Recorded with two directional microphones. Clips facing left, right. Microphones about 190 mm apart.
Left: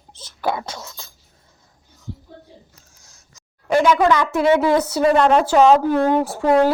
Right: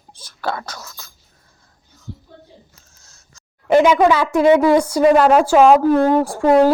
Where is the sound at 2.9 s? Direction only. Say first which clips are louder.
Even; 15° left (ahead or behind).